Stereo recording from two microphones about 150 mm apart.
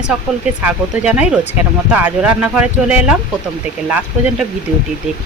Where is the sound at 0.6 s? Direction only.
10° right (ahead or behind).